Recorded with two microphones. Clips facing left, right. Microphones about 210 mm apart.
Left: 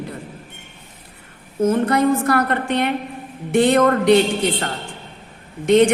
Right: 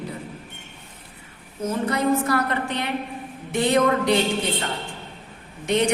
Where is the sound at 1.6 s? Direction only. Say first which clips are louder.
Left 6 dB; 55° left (ahead or behind).